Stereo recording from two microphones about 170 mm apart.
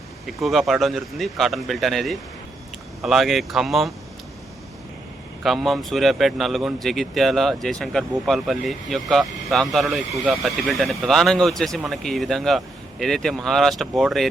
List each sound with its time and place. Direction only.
0.3 s speech: centre (ahead or behind)
5.4 s speech: centre (ahead or behind)